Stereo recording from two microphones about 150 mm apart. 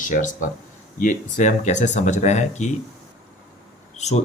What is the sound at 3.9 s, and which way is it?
Speech, 50° left (ahead or behind).